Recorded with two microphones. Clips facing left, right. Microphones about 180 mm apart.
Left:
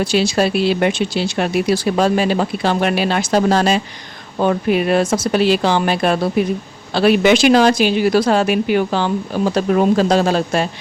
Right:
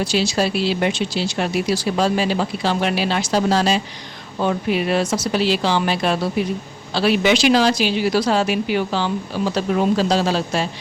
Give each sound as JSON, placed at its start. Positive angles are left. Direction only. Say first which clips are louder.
{"t": 0.0, "sound": "a woman's voice", "louder": "left 4 dB", "side_deg": 55}